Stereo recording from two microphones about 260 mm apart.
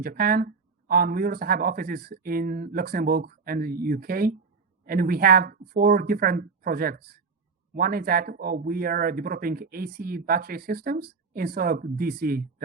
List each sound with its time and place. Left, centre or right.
0.0 s speech: right